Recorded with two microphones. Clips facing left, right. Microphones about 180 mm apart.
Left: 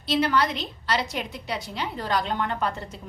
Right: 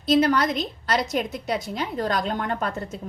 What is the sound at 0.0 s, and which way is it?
A woman's voice, 45° right (ahead or behind).